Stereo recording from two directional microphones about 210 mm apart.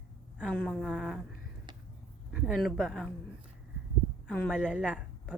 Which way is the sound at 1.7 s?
20° right (ahead or behind).